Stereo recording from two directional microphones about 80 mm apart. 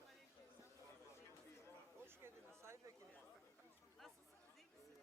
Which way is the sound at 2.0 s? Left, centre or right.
Right.